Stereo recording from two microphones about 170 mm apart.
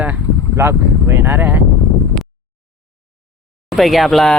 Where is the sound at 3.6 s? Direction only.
Centre (ahead or behind).